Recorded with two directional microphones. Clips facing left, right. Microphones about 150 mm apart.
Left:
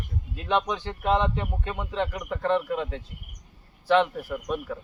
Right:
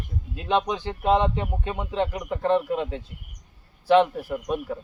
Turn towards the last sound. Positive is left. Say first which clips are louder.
# right 2 dB
turn(degrees=-25)  # may be behind; listen again after turning